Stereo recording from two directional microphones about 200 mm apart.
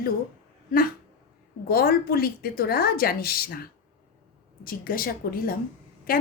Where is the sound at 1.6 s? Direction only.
50° left (ahead or behind).